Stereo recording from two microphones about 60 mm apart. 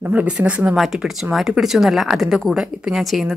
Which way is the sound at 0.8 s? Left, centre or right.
Centre.